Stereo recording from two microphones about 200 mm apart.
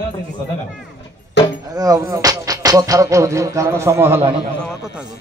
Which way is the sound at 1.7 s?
20° right (ahead or behind).